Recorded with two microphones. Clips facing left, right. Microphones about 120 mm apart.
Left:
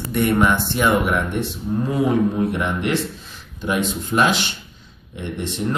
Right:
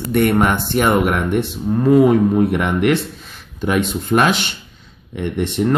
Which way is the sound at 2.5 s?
65° right (ahead or behind).